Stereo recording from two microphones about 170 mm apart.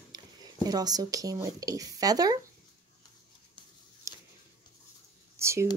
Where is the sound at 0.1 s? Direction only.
25° right (ahead or behind).